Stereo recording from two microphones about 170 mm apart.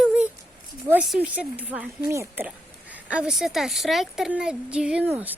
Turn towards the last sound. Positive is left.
turn(degrees=-10)  # may be behind; listen again after turning